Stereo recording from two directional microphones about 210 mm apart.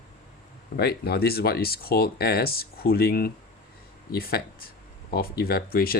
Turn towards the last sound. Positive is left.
turn(degrees=45)  # may be behind; listen again after turning